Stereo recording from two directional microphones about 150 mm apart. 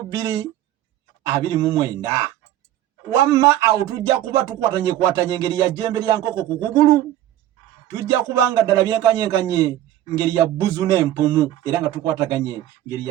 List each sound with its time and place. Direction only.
0.1 s a man's voice: 20° right (ahead or behind)
7.9 s a man's voice: 25° right (ahead or behind)